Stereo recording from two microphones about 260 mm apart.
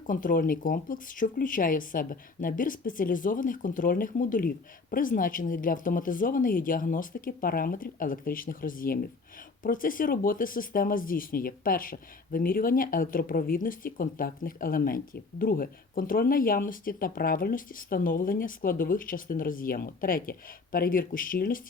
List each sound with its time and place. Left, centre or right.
0.1 s speech: left